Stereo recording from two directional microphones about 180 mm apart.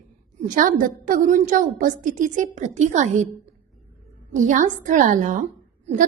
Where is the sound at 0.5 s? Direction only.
45° right (ahead or behind).